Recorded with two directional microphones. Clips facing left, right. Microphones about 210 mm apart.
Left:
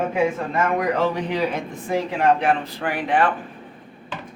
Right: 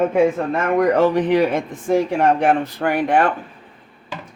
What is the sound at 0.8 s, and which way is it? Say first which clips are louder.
Speech: right 6 dB; 50° right (ahead or behind).